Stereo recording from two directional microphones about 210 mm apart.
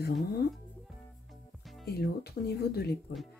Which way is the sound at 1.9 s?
50° left (ahead or behind).